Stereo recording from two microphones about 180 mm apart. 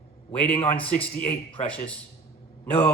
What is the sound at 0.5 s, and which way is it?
A man's voice, 30° left (ahead or behind).